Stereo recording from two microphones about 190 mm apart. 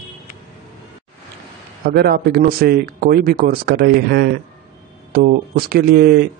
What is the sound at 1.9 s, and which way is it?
Speech, 55° right (ahead or behind).